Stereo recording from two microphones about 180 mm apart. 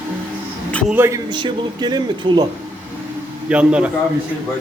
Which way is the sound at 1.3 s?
25° right (ahead or behind).